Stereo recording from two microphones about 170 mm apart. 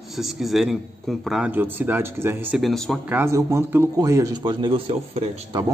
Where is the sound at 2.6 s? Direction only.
Centre (ahead or behind).